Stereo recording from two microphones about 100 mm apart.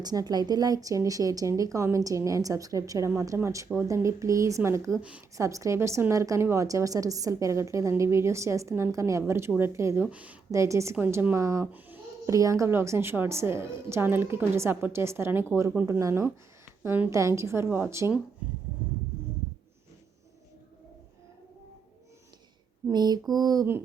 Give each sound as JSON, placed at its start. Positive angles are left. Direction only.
{"t": 0.0, "sound": "a woman's voice", "side_deg": -40}
{"t": 4.9, "sound": "speech", "side_deg": -10}
{"t": 5.4, "sound": "a woman's voice", "side_deg": -30}
{"t": 10.0, "sound": "speech", "side_deg": -15}
{"t": 10.5, "sound": "a woman's voice", "side_deg": -30}
{"t": 11.7, "sound": "a sound", "side_deg": -20}
{"t": 12.3, "sound": "a woman's voice", "side_deg": -35}
{"t": 17.1, "sound": "a woman's voice", "side_deg": -30}
{"t": 22.9, "sound": "a sound", "side_deg": -45}
{"t": 23.3, "sound": "a woman's voice", "side_deg": -40}